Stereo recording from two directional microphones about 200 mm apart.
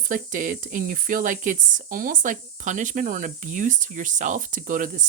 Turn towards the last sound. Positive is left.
turn(degrees=-40)  # may be behind; listen again after turning